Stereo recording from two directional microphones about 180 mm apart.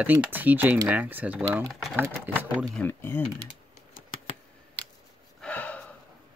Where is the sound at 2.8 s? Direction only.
10° left (ahead or behind).